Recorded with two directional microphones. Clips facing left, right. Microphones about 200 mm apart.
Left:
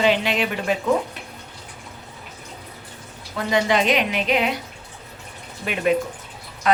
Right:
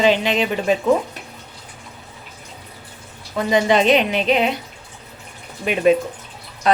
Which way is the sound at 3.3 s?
20° right (ahead or behind).